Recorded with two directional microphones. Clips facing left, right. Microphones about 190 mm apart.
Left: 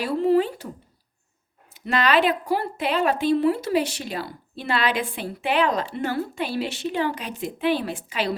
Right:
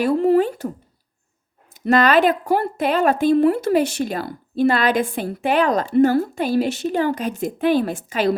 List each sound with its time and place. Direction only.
0.0 s a woman's voice: 50° right (ahead or behind)
1.7 s a woman's voice: 45° right (ahead or behind)